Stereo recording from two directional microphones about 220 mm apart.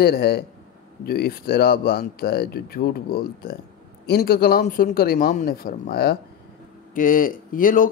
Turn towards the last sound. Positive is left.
turn(degrees=40)  # may be behind; listen again after turning